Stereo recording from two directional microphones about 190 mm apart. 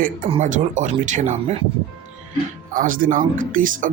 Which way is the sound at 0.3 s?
35° right (ahead or behind).